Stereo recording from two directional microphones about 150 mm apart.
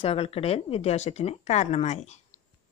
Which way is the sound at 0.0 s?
40° left (ahead or behind).